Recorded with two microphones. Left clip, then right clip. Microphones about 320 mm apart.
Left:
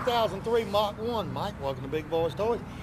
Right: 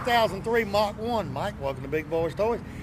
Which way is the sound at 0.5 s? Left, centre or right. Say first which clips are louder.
Even; right.